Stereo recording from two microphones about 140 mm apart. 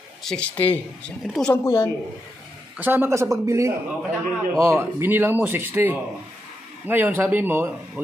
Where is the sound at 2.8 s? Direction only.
15° right (ahead or behind).